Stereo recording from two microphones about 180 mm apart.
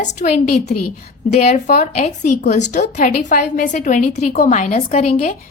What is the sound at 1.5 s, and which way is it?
Speech, 55° left (ahead or behind).